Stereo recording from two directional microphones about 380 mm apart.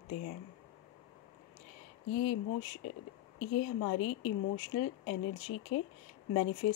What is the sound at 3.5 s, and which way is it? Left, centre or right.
Speech, left.